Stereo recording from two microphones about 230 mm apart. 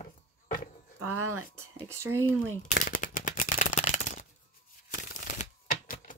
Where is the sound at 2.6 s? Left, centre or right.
Left.